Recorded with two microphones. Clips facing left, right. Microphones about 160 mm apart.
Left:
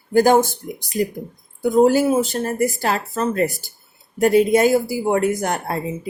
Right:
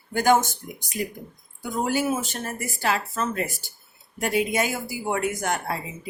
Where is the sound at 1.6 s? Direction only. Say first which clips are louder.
Left 11 dB; 35° left (ahead or behind).